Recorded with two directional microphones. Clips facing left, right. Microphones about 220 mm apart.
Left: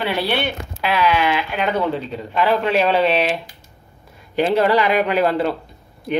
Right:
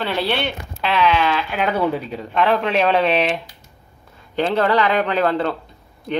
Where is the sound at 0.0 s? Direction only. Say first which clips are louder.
Left 1 dB; 10° left (ahead or behind).